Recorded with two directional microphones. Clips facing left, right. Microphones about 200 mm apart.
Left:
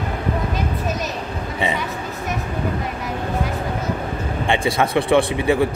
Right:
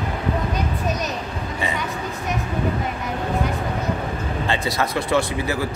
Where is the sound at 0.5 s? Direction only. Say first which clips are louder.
Left 1 dB; centre (ahead or behind).